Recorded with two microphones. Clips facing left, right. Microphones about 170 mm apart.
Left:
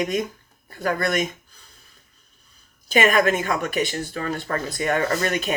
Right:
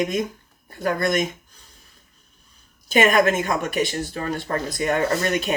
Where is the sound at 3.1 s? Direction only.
40° right (ahead or behind).